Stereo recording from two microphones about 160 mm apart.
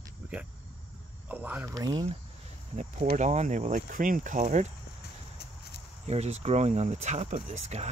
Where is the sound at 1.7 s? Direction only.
20° right (ahead or behind).